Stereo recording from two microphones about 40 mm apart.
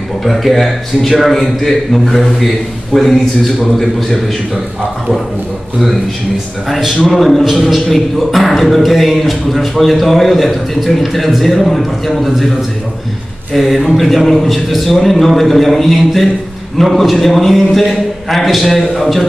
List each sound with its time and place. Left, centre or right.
0.2 s music: centre
2.9 s a man's voice: centre
3.7 s music: centre
7.1 s music: centre
7.4 s music: centre
13.6 s music: centre